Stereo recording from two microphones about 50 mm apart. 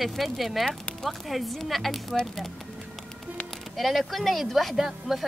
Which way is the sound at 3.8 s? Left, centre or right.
Centre.